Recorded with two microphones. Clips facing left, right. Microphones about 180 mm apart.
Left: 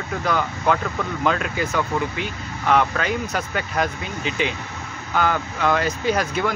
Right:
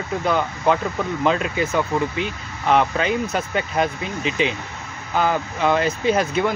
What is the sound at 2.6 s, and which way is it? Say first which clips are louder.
Speech: right 2 dB; 30° right (ahead or behind).